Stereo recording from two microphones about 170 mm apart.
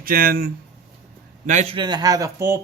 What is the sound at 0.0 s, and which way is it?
Speech, 60° right (ahead or behind).